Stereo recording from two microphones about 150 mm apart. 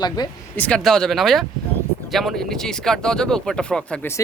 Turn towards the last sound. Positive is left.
turn(degrees=5)  # may be behind; listen again after turning